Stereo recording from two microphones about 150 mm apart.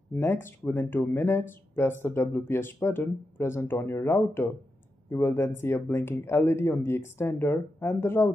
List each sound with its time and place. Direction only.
0.1 s speech: 15° left (ahead or behind)